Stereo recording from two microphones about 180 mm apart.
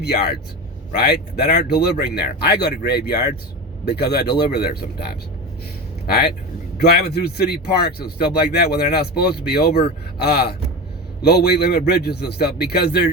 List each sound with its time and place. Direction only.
0.0 s speech: 65° left (ahead or behind)